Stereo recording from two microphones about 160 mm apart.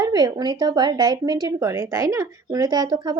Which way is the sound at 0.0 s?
20° right (ahead or behind).